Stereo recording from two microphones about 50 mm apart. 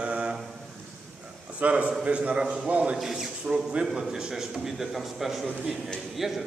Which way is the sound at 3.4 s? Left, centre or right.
Centre.